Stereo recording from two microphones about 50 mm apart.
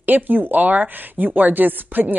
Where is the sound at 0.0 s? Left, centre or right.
Right.